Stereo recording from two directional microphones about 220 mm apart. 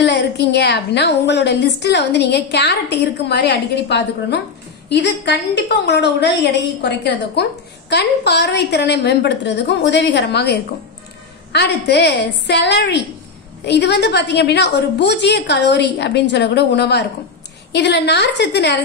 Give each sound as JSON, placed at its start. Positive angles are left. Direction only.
{"t": 0.0, "sound": "a woman's voice", "side_deg": 50}